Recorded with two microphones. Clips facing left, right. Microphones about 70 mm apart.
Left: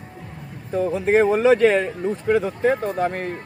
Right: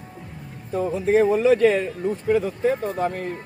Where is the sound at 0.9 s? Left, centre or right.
Left.